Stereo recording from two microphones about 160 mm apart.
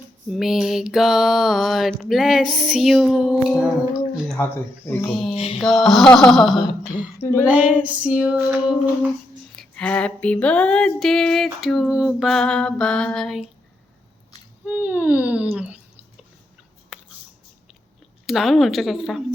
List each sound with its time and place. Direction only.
0.3 s mantra: 5° right (ahead or behind)
4.4 s speech: 15° left (ahead or behind)
5.0 s mantra: centre (ahead or behind)
5.3 s mantra: 40° left (ahead or behind)
5.5 s mantra: centre (ahead or behind)
7.2 s female singing: 15° left (ahead or behind)
7.4 s a sound: 10° right (ahead or behind)
9.6 s mantra: 5° left (ahead or behind)
14.6 s a sound: 10° right (ahead or behind)
16.9 s a sound: 5° right (ahead or behind)
18.3 s mantra: centre (ahead or behind)